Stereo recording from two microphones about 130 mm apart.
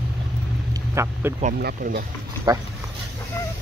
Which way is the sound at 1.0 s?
20° right (ahead or behind).